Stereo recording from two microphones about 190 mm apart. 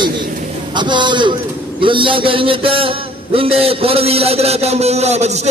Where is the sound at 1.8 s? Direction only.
25° right (ahead or behind).